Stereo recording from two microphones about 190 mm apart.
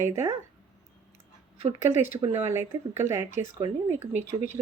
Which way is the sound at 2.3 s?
15° right (ahead or behind).